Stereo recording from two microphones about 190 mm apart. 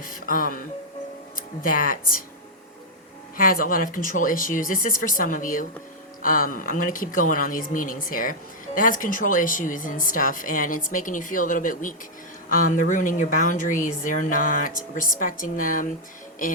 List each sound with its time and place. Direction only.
0.0 s speech: 45° left (ahead or behind)
3.3 s speech: 50° left (ahead or behind)